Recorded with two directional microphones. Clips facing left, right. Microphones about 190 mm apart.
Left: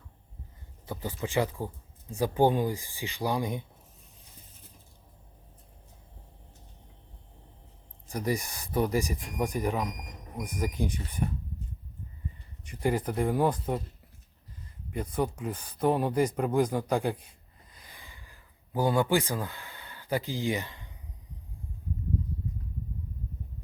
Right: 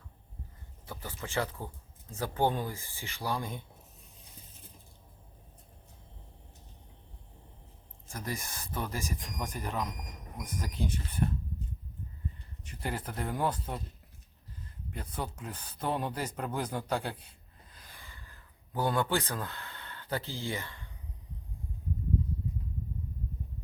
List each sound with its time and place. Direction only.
0.9 s speech: 15° left (ahead or behind)
8.0 s speech: 15° left (ahead or behind)
12.6 s speech: 10° left (ahead or behind)
14.8 s speech: 10° left (ahead or behind)